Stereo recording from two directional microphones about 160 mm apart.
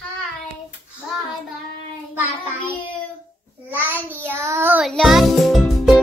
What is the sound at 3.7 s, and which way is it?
Child singing, 10° right (ahead or behind).